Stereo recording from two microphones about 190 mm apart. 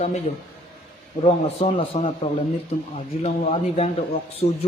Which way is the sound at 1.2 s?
30° left (ahead or behind).